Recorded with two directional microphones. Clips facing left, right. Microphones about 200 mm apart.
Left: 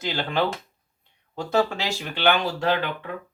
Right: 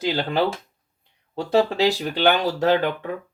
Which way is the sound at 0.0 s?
35° right (ahead or behind).